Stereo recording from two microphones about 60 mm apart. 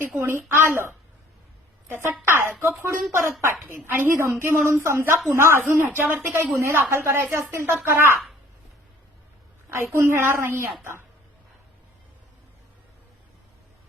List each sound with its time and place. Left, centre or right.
0.2 s a woman's voice: right
2.2 s a woman's voice: right
3.8 s a woman's voice: right
4.4 s a woman's voice: right
5.5 s a woman's voice: right
9.6 s a woman's voice: right